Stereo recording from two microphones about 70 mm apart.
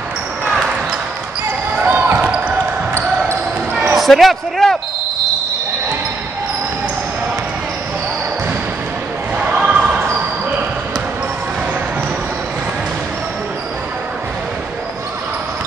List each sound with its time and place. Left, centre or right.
1.8 s basketball bounce: right
3.9 s speech: centre
9.4 s basketball bounce: centre